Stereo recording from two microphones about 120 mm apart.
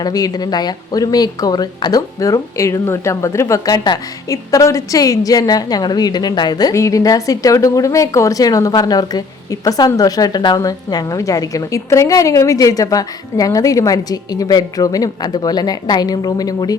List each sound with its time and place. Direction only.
0.0 s speech: 30° left (ahead or behind)